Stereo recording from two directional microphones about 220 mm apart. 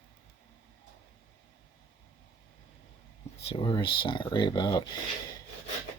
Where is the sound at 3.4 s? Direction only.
25° left (ahead or behind).